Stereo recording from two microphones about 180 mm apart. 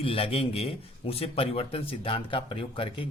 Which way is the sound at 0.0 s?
30° left (ahead or behind).